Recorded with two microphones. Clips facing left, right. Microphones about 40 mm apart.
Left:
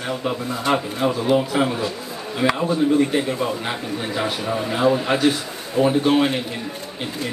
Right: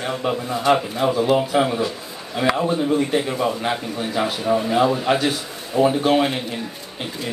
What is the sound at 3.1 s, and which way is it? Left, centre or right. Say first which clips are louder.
A man's voice: right 1 dB; centre.